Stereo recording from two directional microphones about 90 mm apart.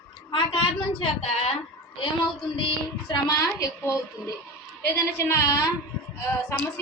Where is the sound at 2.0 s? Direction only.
70° left (ahead or behind).